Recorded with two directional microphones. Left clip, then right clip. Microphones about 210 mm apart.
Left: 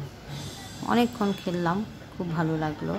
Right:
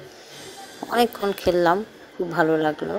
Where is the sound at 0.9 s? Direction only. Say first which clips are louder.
Right 6 dB; 35° right (ahead or behind).